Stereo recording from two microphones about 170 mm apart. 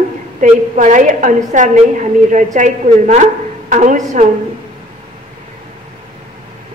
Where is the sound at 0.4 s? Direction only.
50° right (ahead or behind).